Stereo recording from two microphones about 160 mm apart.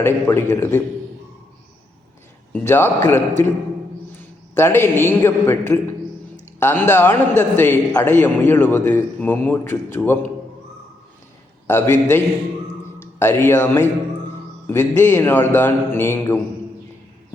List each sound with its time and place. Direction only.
0.0 s a man's voice: 15° left (ahead or behind)
2.5 s a man's voice: 15° left (ahead or behind)
11.7 s a man's voice: 15° left (ahead or behind)
12.8 s a sound: 15° left (ahead or behind)
14.7 s a man's voice: 15° left (ahead or behind)